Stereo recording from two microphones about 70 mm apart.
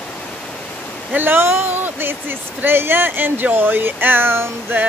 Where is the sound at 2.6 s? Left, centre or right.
Right.